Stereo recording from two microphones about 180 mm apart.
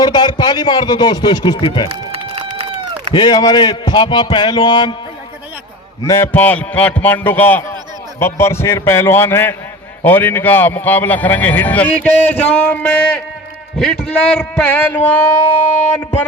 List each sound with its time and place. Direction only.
0.0 s a man's voice: 25° left (ahead or behind)
1.9 s a sound: 30° right (ahead or behind)
3.1 s a man's voice: 25° left (ahead or behind)
6.1 s a man's voice: 10° left (ahead or behind)